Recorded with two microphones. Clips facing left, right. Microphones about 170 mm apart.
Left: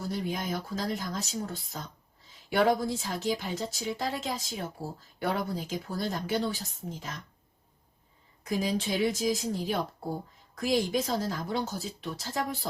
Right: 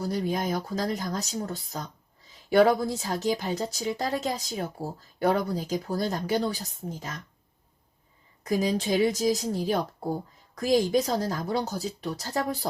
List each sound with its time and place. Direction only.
0.0 s a woman's voice: 40° right (ahead or behind)
8.4 s a woman's voice: 40° right (ahead or behind)